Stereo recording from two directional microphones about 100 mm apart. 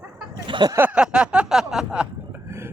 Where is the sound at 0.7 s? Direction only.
15° right (ahead or behind).